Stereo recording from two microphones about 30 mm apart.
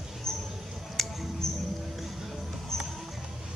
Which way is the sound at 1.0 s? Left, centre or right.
Centre.